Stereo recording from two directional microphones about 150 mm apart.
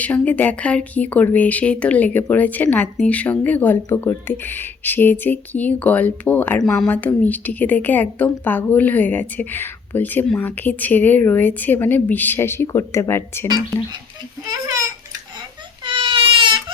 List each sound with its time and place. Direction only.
0.0 s speech: 10° left (ahead or behind)
14.4 s a child's voice: 25° right (ahead or behind)
15.8 s crying: 35° right (ahead or behind)